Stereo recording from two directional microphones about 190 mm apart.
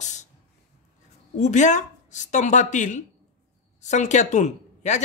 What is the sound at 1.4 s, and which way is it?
Speech, 40° left (ahead or behind).